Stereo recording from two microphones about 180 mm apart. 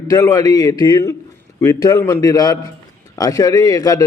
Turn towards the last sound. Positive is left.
turn(degrees=20)  # may be behind; listen again after turning